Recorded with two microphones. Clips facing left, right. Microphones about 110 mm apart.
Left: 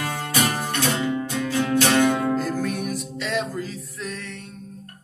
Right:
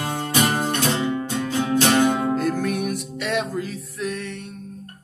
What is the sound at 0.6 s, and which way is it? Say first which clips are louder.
Music: right 2 dB; 25° right (ahead or behind).